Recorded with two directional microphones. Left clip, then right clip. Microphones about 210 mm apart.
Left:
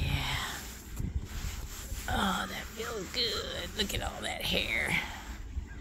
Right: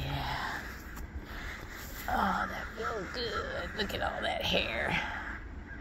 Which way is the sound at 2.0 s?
60° left (ahead or behind).